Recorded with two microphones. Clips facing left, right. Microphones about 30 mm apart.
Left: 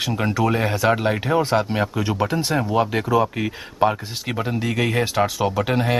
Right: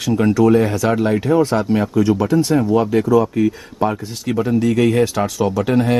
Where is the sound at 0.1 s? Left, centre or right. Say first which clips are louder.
Right 10 dB; centre.